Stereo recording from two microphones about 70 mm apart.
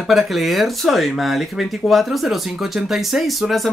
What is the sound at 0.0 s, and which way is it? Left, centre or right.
Speech, centre.